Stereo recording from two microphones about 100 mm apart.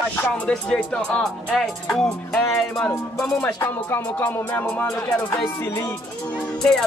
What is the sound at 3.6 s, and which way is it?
Music, 20° left (ahead or behind).